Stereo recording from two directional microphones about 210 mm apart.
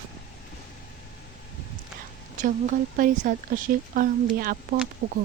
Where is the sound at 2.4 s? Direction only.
40° right (ahead or behind).